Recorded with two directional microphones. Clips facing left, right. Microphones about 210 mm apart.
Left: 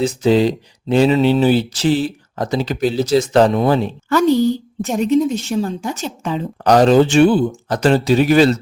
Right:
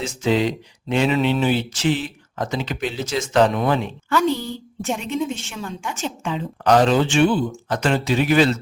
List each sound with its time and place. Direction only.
0.0 s speech: 35° left (ahead or behind)